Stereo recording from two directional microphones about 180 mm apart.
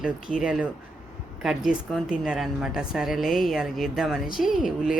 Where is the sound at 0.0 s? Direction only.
5° right (ahead or behind).